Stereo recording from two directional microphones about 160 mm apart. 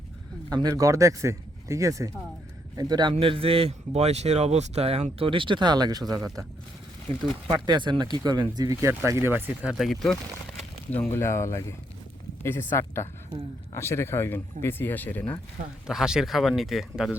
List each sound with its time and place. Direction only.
0.5 s a man's voice: 25° right (ahead or behind)
7.4 s a man's voice: 30° right (ahead or behind); by 9.7 s 10° right (ahead or behind)
9.7 s speech: centre (ahead or behind)
11.1 s speech: 15° left (ahead or behind)
15.9 s speech: 5° right (ahead or behind)